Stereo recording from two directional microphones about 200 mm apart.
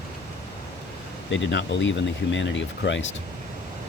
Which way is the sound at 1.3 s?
60° left (ahead or behind).